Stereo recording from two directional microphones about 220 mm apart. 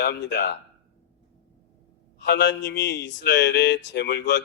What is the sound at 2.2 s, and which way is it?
Speech, 50° left (ahead or behind).